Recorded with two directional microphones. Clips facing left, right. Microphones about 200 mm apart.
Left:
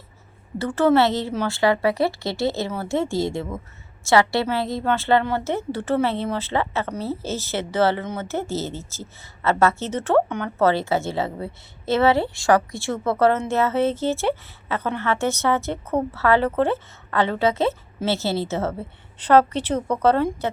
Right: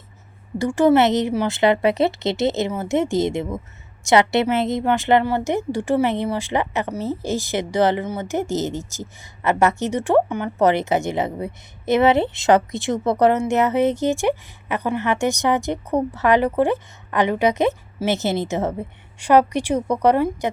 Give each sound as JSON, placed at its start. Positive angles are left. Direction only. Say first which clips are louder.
{"t": 0.6, "sound": "a woman's voice", "louder": "right 2 dB", "side_deg": -15}